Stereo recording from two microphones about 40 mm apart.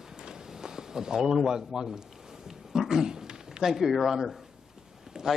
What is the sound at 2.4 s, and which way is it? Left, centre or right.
Dog, centre.